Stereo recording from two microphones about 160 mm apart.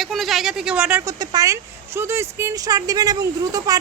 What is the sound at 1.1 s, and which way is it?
Speech, 20° right (ahead or behind).